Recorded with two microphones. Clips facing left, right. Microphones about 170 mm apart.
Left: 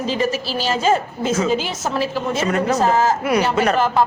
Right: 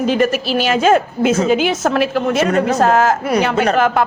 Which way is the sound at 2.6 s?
55° right (ahead or behind).